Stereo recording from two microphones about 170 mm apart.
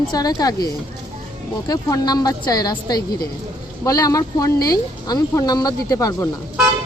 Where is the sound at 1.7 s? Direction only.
25° left (ahead or behind).